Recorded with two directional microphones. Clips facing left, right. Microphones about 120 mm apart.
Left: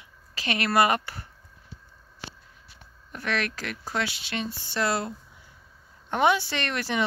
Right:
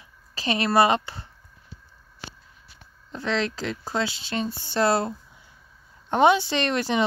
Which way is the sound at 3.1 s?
25° right (ahead or behind).